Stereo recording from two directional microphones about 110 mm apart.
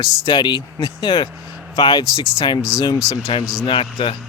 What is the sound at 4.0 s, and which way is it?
Speech, 45° left (ahead or behind).